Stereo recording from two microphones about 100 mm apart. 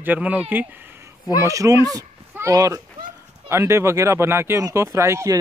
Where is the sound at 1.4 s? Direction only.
35° right (ahead or behind).